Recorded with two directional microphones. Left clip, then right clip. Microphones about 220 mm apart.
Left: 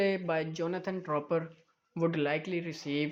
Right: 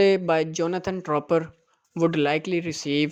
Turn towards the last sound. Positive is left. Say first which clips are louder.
# right 9 dB
turn(degrees=-40)  # may be behind; listen again after turning